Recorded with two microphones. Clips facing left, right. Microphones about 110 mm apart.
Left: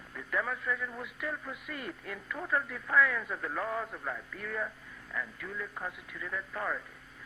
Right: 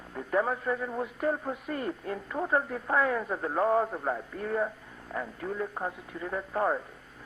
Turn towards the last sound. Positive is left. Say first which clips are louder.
# right 7 dB
turn(degrees=-40)  # may be behind; listen again after turning